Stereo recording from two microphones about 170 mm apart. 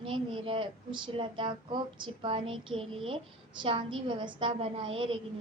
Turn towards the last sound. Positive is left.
turn(degrees=-35)  # may be behind; listen again after turning